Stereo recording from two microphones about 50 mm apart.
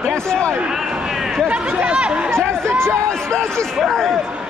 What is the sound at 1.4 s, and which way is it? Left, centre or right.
Speech, right.